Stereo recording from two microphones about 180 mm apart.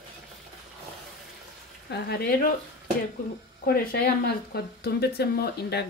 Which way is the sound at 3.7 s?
55° left (ahead or behind).